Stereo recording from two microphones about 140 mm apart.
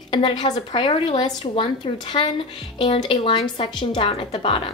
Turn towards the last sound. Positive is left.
turn(degrees=40)  # may be behind; listen again after turning